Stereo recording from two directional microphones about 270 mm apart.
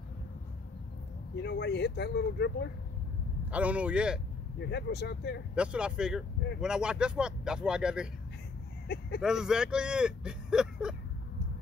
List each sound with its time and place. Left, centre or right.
1.3 s speech: left
3.5 s speech: centre
4.6 s speech: left
5.5 s speech: centre
8.8 s speech: left
9.2 s speech: centre